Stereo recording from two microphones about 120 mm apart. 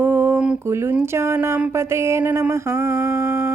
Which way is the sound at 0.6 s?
20° right (ahead or behind).